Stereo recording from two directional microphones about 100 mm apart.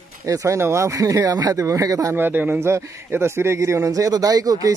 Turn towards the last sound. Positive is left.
turn(degrees=-35)  # may be behind; listen again after turning